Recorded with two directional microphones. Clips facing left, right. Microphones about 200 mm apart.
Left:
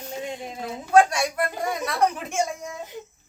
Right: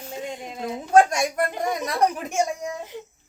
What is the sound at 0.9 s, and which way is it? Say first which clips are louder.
Speech: right 1 dB; 45° right (ahead or behind).